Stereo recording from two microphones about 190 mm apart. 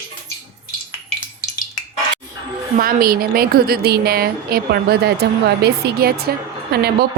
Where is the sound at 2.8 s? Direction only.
50° right (ahead or behind).